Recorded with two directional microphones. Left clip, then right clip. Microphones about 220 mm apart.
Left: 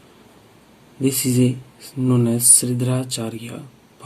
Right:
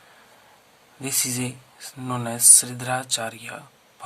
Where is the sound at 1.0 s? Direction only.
40° right (ahead or behind).